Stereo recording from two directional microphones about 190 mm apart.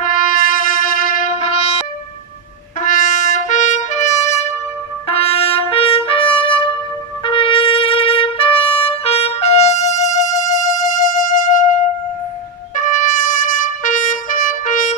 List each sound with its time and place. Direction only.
0.0 s music: 45° left (ahead or behind)
2.8 s trumpet: 45° left (ahead or behind)
12.7 s trumpet: 40° left (ahead or behind)